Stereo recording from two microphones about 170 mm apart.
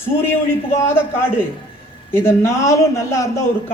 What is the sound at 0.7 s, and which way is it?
Speech, 15° left (ahead or behind).